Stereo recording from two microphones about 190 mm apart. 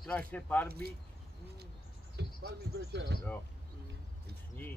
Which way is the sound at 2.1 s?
65° right (ahead or behind).